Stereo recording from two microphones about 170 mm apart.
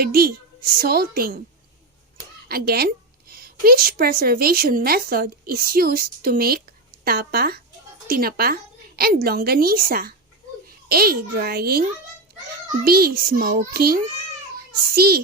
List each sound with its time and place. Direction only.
0.0 s a woman's voice: 60° right (ahead or behind)
2.5 s a woman's voice: 65° right (ahead or behind)